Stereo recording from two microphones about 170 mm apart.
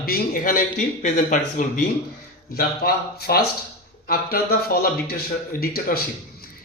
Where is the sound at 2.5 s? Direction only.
65° left (ahead or behind).